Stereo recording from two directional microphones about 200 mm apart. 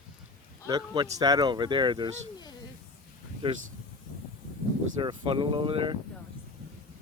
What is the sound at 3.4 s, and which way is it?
Speech, 25° right (ahead or behind).